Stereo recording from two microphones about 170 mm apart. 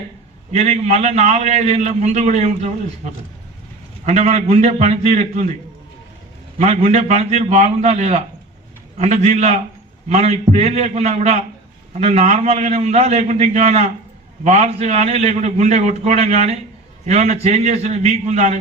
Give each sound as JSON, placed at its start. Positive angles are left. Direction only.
{"t": 0.5, "sound": "a man's voice", "side_deg": -40}
{"t": 6.6, "sound": "a man's voice", "side_deg": -40}